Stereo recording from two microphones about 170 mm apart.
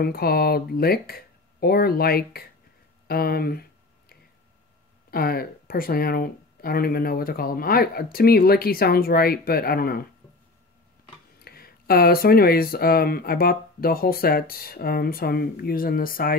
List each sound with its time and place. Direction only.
0.0 s speech: 65° left (ahead or behind)
5.1 s speech: 60° left (ahead or behind)
11.4 s speech: 65° left (ahead or behind)